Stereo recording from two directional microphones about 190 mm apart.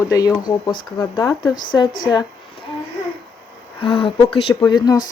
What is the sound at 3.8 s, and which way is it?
Speech, 30° left (ahead or behind).